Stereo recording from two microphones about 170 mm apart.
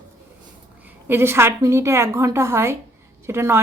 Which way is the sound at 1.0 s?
15° right (ahead or behind).